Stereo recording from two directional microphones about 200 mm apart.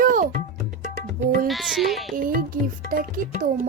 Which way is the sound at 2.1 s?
45° right (ahead or behind).